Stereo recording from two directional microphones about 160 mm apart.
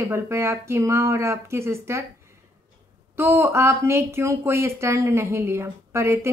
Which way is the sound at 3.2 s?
15° right (ahead or behind).